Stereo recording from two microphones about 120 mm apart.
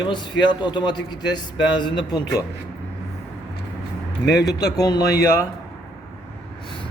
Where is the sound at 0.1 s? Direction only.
40° left (ahead or behind).